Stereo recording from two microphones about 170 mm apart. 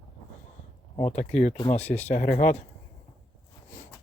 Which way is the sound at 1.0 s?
40° left (ahead or behind).